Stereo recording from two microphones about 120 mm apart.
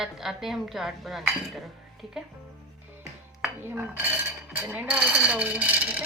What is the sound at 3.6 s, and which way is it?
Speech, 15° right (ahead or behind).